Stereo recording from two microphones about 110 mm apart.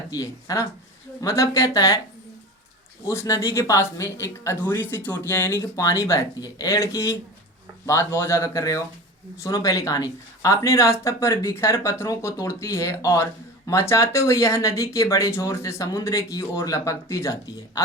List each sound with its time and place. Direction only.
0.1 s speech: 30° left (ahead or behind)
3.1 s speech: 25° left (ahead or behind)
17.4 s speech: 35° left (ahead or behind)